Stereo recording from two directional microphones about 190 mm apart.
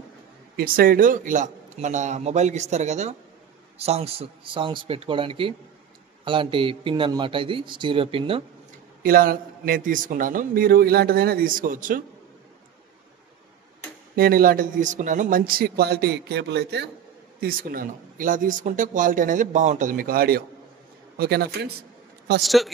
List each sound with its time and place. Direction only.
0.6 s a man's voice: 50° right (ahead or behind); by 8.5 s 30° right (ahead or behind)
9.0 s speech: 50° right (ahead or behind)
14.1 s a man's voice: 50° right (ahead or behind)
22.4 s a woman's voice: centre (ahead or behind)